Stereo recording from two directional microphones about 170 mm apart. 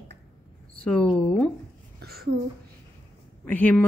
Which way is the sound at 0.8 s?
5° left (ahead or behind).